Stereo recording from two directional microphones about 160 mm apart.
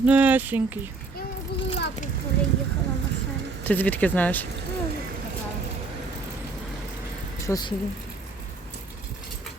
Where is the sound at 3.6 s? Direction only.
10° left (ahead or behind).